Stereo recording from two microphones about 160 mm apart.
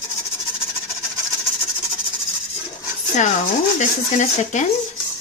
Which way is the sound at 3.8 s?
50° left (ahead or behind).